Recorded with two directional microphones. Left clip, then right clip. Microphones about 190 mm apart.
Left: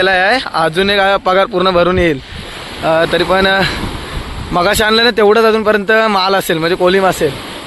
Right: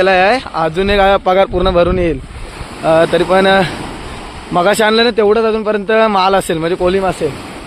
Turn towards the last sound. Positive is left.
turn(degrees=5)  # may be behind; listen again after turning